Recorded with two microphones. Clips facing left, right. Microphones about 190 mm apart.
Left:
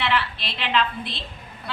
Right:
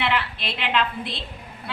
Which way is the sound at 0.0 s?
15° right (ahead or behind).